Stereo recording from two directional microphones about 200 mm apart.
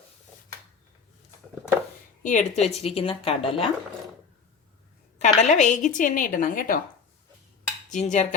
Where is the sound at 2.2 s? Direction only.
40° left (ahead or behind).